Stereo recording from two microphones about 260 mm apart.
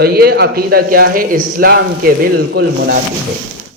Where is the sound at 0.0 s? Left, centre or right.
Right.